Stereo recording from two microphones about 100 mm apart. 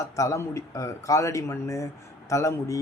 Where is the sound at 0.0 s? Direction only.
30° left (ahead or behind).